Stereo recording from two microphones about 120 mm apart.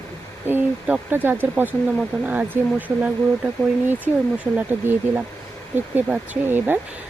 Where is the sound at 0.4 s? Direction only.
15° right (ahead or behind).